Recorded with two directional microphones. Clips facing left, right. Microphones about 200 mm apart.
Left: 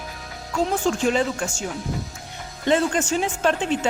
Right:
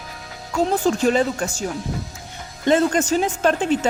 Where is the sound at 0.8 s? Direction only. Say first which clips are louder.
Right 3 dB; 40° right (ahead or behind).